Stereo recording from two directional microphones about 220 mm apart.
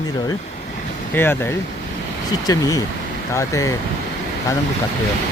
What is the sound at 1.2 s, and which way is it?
Speech, 10° left (ahead or behind).